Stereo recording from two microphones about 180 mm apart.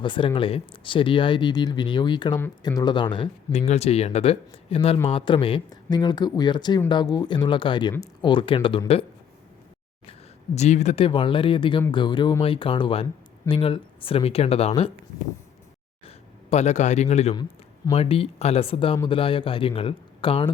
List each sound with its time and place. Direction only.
0.0 s a man's voice: 30° left (ahead or behind)
10.1 s a man's voice: 35° left (ahead or behind)
16.0 s a man's voice: 35° left (ahead or behind)